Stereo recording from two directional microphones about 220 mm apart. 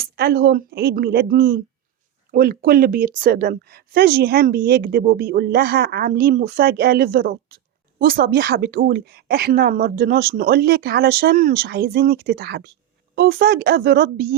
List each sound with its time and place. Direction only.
0.0 s a woman's voice: 45° right (ahead or behind)